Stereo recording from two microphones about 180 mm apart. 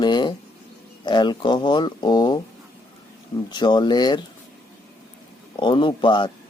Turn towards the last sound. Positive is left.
turn(degrees=25)  # may be behind; listen again after turning